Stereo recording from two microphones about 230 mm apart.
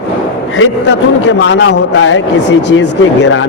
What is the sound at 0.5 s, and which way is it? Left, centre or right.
A man's voice, left.